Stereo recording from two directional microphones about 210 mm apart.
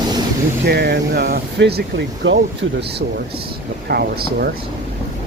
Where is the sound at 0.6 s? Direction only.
50° right (ahead or behind).